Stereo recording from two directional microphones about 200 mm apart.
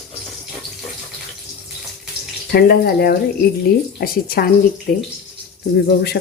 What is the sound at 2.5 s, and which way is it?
Speech, 50° left (ahead or behind).